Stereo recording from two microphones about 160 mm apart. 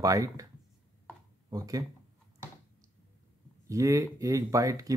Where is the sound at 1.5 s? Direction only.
20° right (ahead or behind).